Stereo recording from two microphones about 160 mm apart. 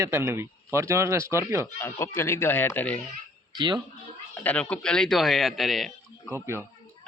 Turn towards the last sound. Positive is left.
turn(degrees=-15)  # may be behind; listen again after turning